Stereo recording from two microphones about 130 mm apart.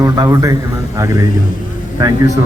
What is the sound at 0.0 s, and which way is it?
Speech, 25° right (ahead or behind).